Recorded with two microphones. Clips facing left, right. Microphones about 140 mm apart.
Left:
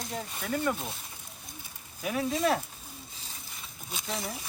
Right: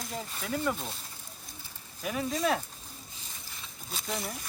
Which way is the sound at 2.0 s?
Centre (ahead or behind).